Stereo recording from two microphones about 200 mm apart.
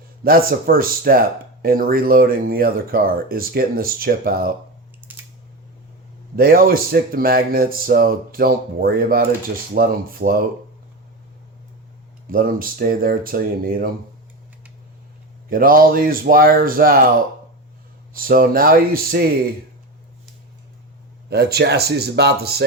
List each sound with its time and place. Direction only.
0.3 s speech: 45° right (ahead or behind)
5.0 s scissors: 10° right (ahead or behind)
6.3 s speech: 45° right (ahead or behind)
12.3 s speech: 45° right (ahead or behind)
15.4 s speech: 45° right (ahead or behind)
18.1 s speech: 45° right (ahead or behind)
21.2 s speech: 55° right (ahead or behind)